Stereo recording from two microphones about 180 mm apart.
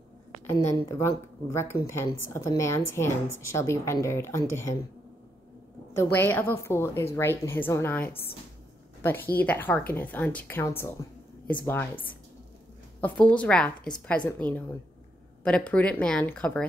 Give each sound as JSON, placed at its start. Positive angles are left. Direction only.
{"t": 0.8, "sound": "a woman's voice", "side_deg": 15}
{"t": 5.9, "sound": "a woman's voice", "side_deg": 10}
{"t": 13.0, "sound": "a woman's voice", "side_deg": 10}
{"t": 15.4, "sound": "a woman's voice", "side_deg": 5}